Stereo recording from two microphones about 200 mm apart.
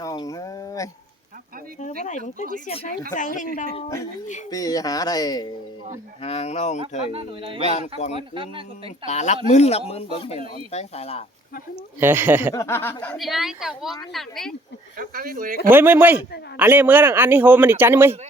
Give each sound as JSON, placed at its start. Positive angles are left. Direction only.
{"t": 0.0, "sound": "a sound", "side_deg": 15}
{"t": 2.0, "sound": "speech", "side_deg": 35}
{"t": 3.8, "sound": "speech", "side_deg": 20}
{"t": 6.2, "sound": "speech", "side_deg": 30}
{"t": 7.1, "sound": "speech", "side_deg": -30}
{"t": 7.7, "sound": "speech", "side_deg": 35}
{"t": 8.1, "sound": "speech", "side_deg": -25}
{"t": 9.0, "sound": "speech", "side_deg": 35}
{"t": 11.9, "sound": "speech", "side_deg": -10}
{"t": 12.5, "sound": "a woman's voice", "side_deg": 15}
{"t": 14.9, "sound": "speech", "side_deg": -45}
{"t": 15.7, "sound": "speech", "side_deg": -10}